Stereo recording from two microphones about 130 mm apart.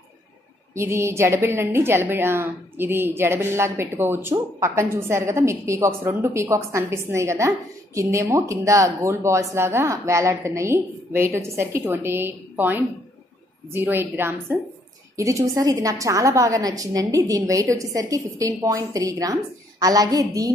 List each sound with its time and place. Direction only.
0.7 s a woman's voice: 20° right (ahead or behind)